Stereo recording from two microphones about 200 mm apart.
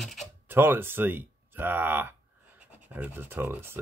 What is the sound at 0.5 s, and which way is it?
Speech, 10° right (ahead or behind).